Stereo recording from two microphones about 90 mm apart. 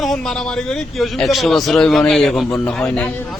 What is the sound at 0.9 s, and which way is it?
A man's voice, centre (ahead or behind).